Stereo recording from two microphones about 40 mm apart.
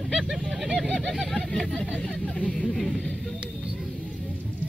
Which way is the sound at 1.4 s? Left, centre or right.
Centre.